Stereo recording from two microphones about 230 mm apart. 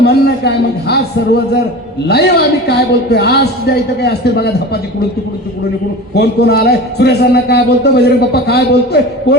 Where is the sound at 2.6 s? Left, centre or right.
Left.